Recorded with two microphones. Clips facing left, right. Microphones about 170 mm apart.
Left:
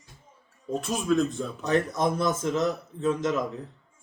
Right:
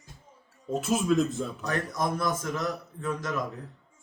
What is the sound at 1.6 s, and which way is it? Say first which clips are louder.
A man's voice: left 7 dB; 25° left (ahead or behind).